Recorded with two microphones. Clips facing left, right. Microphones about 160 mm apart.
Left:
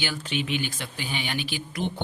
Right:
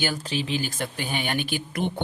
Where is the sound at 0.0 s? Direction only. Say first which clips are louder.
Right 2 dB; 40° right (ahead or behind).